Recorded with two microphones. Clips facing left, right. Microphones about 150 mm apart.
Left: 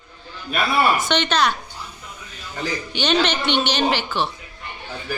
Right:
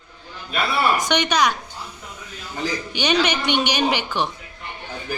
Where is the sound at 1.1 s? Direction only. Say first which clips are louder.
Even; 10° right (ahead or behind).